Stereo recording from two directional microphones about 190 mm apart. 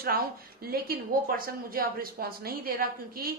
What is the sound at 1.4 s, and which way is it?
A woman's voice, 50° right (ahead or behind).